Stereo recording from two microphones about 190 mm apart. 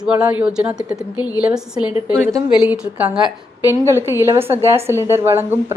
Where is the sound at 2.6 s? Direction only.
5° right (ahead or behind).